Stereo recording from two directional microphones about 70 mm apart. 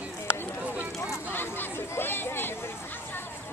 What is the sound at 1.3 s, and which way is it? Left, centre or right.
Chatter, left.